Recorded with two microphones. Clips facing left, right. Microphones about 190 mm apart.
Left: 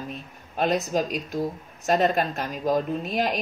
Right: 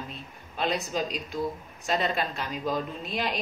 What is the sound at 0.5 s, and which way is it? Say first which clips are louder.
A woman's voice: left 5 dB; 45° left (ahead or behind).